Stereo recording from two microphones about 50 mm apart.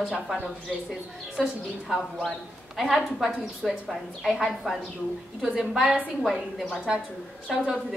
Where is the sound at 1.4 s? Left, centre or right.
Centre.